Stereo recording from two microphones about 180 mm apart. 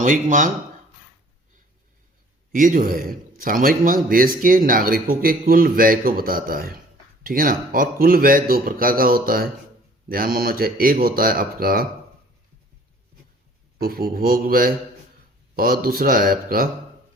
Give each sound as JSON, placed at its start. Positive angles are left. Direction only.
{"t": 0.0, "sound": "a man's voice", "side_deg": -45}
{"t": 2.5, "sound": "a man's voice", "side_deg": -50}
{"t": 13.7, "sound": "speech", "side_deg": -55}